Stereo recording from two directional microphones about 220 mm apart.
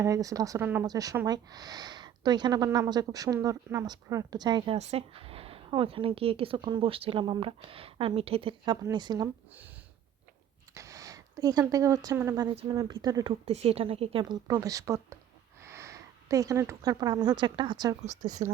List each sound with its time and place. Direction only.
0.0 s speech: 15° right (ahead or behind)
10.8 s speech: 15° right (ahead or behind)
13.4 s speech: 30° right (ahead or behind)
18.0 s speech: 35° right (ahead or behind)